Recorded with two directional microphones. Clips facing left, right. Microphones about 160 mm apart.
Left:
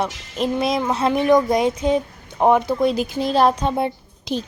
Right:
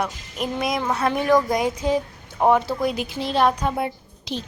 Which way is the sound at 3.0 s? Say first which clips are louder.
Left 4 dB; 40° left (ahead or behind).